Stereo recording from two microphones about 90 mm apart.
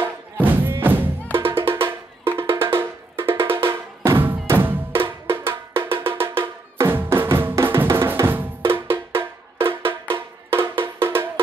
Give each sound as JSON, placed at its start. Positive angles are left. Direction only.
{"t": 0.0, "sound": "music", "side_deg": -20}